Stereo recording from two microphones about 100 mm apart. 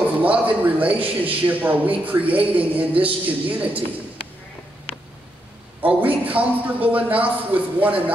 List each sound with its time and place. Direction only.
0.2 s a man's voice: 15° right (ahead or behind)
5.8 s a man's voice: 15° right (ahead or behind)